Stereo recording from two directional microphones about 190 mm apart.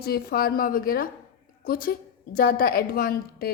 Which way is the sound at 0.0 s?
55° left (ahead or behind).